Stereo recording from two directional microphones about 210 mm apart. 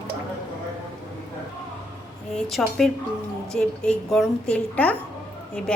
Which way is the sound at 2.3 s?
Centre (ahead or behind).